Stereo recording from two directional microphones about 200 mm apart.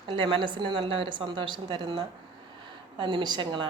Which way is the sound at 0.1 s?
25° right (ahead or behind).